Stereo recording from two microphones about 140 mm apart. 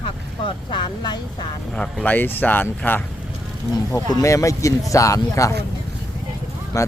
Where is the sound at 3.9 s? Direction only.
25° left (ahead or behind).